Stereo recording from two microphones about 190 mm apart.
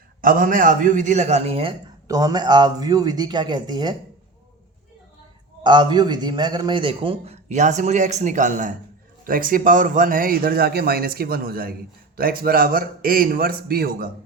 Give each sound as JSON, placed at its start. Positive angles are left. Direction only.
{"t": 0.2, "sound": "a man's voice", "side_deg": -45}
{"t": 2.0, "sound": "a man's voice", "side_deg": -20}
{"t": 5.6, "sound": "a man's voice", "side_deg": -25}